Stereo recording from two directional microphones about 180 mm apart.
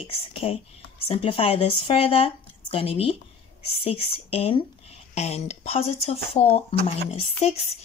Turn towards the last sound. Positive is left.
turn(degrees=35)  # may be behind; listen again after turning